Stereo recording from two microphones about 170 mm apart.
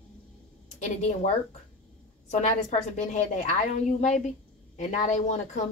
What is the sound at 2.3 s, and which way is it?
A woman's voice, 45° left (ahead or behind).